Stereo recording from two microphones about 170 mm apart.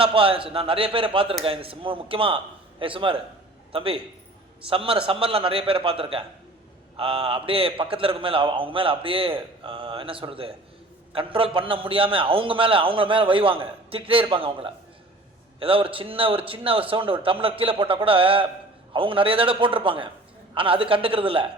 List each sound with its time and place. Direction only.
0.0 s a man's voice: 30° right (ahead or behind)